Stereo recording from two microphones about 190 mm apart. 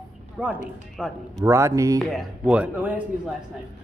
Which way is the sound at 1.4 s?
15° right (ahead or behind).